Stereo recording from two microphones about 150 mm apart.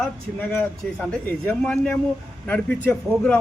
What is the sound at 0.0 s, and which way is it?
A man's voice, 10° left (ahead or behind).